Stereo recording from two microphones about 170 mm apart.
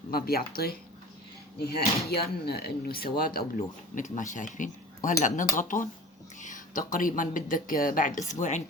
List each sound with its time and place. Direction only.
0.1 s speech: 65° left (ahead or behind)
3.9 s speech: 45° left (ahead or behind)